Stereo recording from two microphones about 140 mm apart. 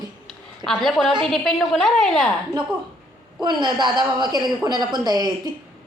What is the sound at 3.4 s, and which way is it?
A woman's voice, 30° right (ahead or behind).